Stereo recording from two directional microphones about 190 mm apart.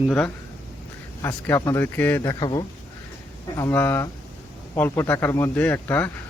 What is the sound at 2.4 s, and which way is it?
Speech, 25° left (ahead or behind).